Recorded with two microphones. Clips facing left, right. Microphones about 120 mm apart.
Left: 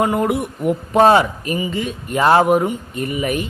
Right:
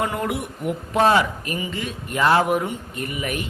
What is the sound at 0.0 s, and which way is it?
Speech, 25° left (ahead or behind).